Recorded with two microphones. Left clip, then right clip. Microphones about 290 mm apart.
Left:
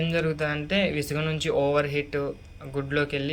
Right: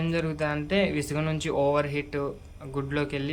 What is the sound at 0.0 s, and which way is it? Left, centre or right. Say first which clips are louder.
Speech: left 2 dB; centre.